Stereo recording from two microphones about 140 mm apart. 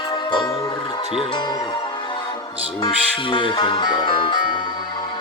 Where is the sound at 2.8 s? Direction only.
35° left (ahead or behind).